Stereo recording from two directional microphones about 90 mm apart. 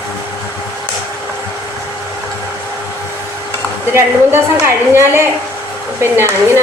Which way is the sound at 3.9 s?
25° right (ahead or behind).